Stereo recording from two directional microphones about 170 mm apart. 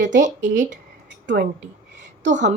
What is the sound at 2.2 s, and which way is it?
Speech, 45° right (ahead or behind).